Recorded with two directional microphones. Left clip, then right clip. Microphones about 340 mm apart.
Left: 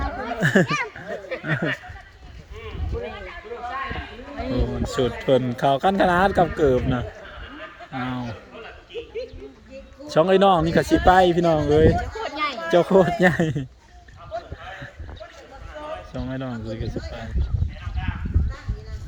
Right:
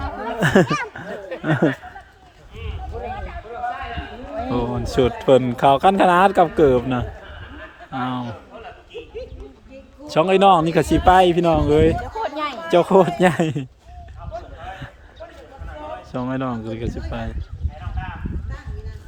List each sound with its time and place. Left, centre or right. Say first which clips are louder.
0.3 s speech: right 3 dB; centre
2.9 s a sound: even; centre
4.4 s speech: right 3 dB; centre
10.1 s speech: right 2 dB; centre
12.1 s a sound: right 2 dB; right
12.7 s speech: right 3 dB; centre
16.1 s speech: right 6 dB; centre